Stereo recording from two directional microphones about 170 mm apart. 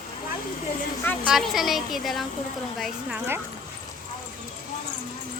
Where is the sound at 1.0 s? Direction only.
10° left (ahead or behind).